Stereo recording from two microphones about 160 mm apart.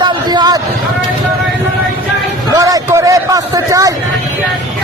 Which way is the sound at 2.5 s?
20° right (ahead or behind).